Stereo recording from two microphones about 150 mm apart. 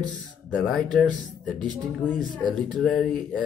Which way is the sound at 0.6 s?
5° left (ahead or behind).